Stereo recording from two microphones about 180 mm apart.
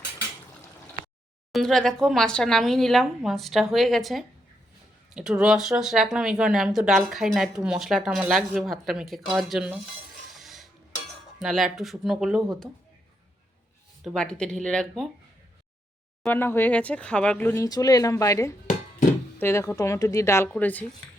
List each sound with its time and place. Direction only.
1.5 s speech: centre (ahead or behind)
10.3 s stir: centre (ahead or behind)
11.3 s speech: centre (ahead or behind)
14.0 s speech: centre (ahead or behind)
16.2 s speech: 10° left (ahead or behind)